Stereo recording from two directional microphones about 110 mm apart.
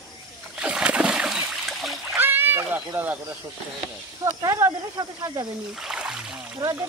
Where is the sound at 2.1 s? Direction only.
20° right (ahead or behind).